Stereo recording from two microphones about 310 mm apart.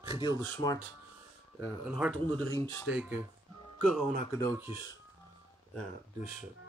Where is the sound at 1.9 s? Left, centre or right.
Centre.